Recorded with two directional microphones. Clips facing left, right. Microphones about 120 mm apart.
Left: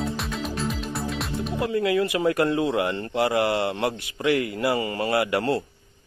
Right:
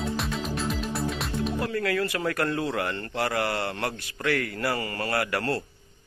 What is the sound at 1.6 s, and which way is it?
Speech, 20° left (ahead or behind).